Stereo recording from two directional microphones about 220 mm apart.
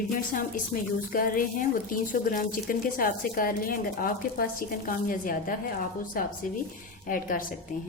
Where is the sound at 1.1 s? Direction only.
40° left (ahead or behind).